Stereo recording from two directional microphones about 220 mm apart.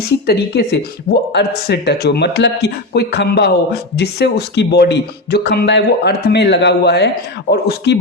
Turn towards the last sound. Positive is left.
turn(degrees=50)  # may be behind; listen again after turning